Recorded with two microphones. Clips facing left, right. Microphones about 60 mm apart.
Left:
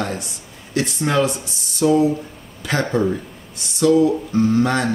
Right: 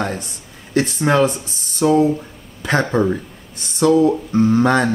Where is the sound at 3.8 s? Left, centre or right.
Right.